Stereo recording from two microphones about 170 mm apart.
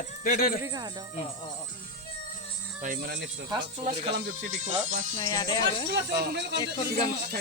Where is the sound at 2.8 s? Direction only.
55° right (ahead or behind).